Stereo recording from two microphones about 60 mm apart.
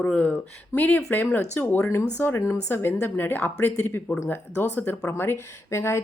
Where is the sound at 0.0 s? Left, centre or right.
Centre.